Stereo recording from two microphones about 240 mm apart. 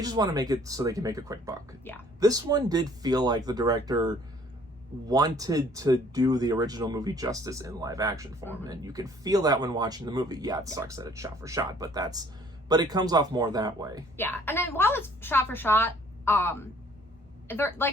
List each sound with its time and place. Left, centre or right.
0.0 s speech: centre
1.8 s a woman's voice: centre
2.2 s speech: centre
14.2 s a woman's voice: centre